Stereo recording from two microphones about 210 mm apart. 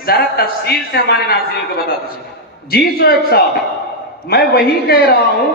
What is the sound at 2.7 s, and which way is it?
A man's voice, 45° left (ahead or behind).